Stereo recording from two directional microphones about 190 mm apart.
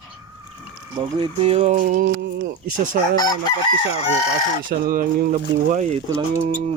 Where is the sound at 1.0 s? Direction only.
25° right (ahead or behind).